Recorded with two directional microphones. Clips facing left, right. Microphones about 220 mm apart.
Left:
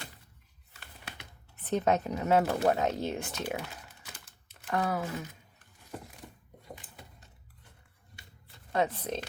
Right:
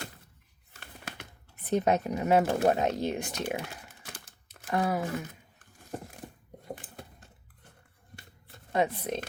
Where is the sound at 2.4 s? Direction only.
30° right (ahead or behind).